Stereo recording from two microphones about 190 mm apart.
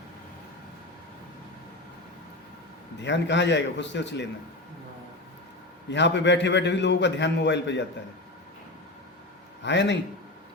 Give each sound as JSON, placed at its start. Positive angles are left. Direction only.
{"t": 3.0, "sound": "a man's voice", "side_deg": 70}
{"t": 5.9, "sound": "a man's voice", "side_deg": 70}
{"t": 9.6, "sound": "a man's voice", "side_deg": 70}